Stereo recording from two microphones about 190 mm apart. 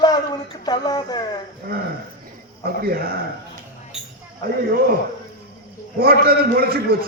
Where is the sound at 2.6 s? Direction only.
50° right (ahead or behind).